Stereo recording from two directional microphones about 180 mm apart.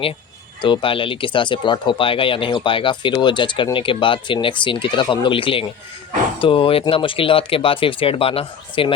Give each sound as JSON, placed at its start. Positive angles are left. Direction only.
{"t": 0.6, "sound": "speech", "side_deg": 30}